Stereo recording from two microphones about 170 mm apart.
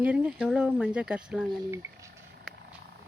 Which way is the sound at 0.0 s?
5° right (ahead or behind).